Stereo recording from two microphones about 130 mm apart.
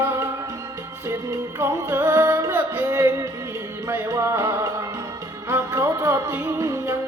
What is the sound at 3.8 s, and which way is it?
Music, 20° right (ahead or behind).